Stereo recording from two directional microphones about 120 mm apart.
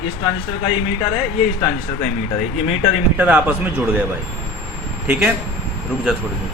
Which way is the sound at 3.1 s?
10° right (ahead or behind).